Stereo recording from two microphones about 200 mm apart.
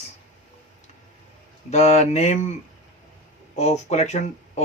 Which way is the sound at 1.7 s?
35° left (ahead or behind).